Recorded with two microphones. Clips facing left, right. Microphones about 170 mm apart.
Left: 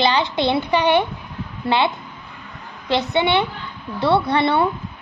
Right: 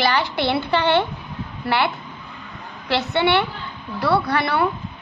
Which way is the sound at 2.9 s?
15° left (ahead or behind).